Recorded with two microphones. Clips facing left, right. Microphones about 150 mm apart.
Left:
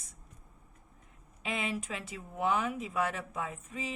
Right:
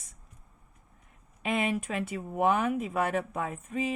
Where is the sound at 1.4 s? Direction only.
55° right (ahead or behind).